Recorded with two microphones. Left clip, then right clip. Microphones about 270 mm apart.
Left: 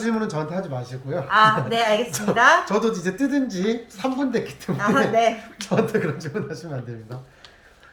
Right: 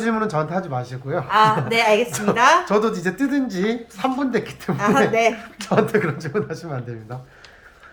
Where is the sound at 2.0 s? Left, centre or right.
Centre.